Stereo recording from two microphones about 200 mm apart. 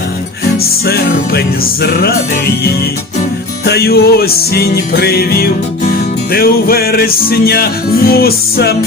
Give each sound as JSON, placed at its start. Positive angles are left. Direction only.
{"t": 0.9, "sound": "music", "side_deg": 50}
{"t": 3.7, "sound": "music", "side_deg": 50}